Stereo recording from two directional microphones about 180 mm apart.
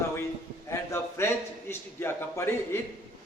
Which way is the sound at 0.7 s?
15° left (ahead or behind).